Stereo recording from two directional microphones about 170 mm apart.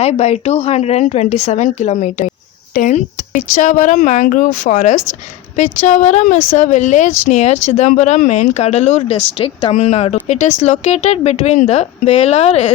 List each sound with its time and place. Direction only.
0.0 s a woman's voice: 40° left (ahead or behind)